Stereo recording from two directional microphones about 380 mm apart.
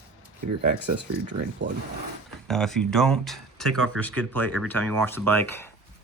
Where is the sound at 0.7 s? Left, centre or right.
Right.